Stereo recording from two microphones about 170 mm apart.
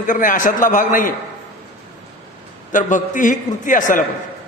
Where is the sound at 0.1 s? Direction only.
50° left (ahead or behind).